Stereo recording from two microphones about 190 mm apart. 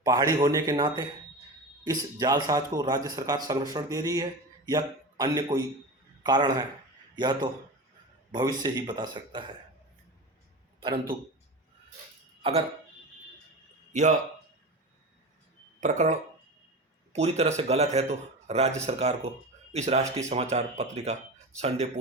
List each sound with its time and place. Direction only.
0.0 s a man's voice: 20° right (ahead or behind)
10.8 s a sound: 25° right (ahead or behind)
12.4 s speech: 35° right (ahead or behind)
13.9 s a man's voice: 40° right (ahead or behind)
15.8 s a man's voice: 40° right (ahead or behind)